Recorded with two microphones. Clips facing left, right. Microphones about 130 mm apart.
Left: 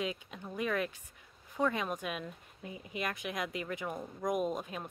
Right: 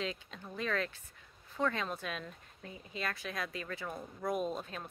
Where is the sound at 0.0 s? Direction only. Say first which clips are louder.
Left 2 dB; 15° left (ahead or behind).